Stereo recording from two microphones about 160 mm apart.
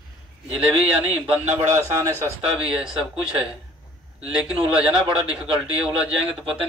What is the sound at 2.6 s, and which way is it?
Speech, 5° right (ahead or behind).